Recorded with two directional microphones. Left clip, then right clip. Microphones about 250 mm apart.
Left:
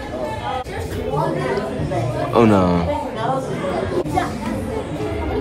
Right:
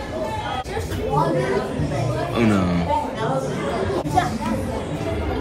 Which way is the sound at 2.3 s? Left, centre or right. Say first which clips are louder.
Left 8 dB; centre.